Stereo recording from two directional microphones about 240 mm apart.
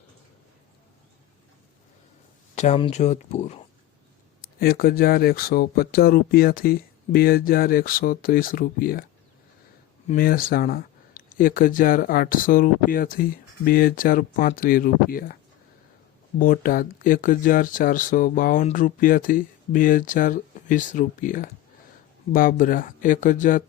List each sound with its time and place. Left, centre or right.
2.6 s speech: left
4.6 s speech: left
10.1 s speech: left
16.4 s speech: left